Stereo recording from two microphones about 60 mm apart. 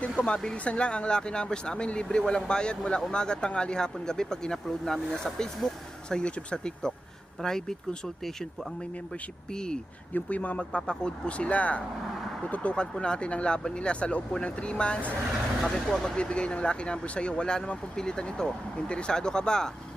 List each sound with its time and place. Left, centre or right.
0.0 s speech: centre
9.5 s speech: centre
10.2 s speech: left